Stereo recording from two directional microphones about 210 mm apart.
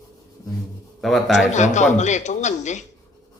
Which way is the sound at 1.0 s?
Centre (ahead or behind).